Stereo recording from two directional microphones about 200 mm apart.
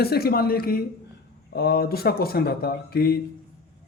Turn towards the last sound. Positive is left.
turn(degrees=50)  # may be behind; listen again after turning